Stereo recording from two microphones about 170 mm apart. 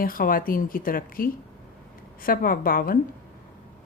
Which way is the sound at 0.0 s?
60° left (ahead or behind).